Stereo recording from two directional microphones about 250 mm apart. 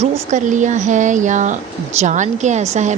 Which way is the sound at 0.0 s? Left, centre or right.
Right.